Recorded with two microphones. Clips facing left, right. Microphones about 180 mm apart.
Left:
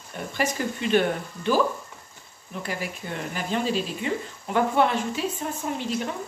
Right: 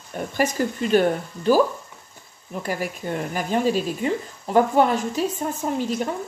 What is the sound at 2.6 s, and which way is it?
Speech, 45° right (ahead or behind).